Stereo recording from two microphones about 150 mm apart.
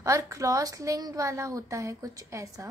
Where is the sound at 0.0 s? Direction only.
20° right (ahead or behind).